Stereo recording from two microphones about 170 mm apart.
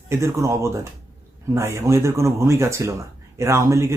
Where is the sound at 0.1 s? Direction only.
15° right (ahead or behind).